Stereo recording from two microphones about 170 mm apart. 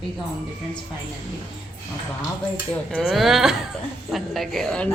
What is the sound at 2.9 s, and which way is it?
A woman's voice, 5° right (ahead or behind).